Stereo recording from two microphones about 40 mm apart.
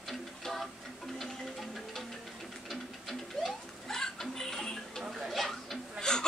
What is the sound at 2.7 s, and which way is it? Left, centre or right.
Music, centre.